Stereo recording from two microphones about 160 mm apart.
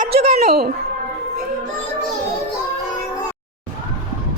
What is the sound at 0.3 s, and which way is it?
Music, 75° right (ahead or behind).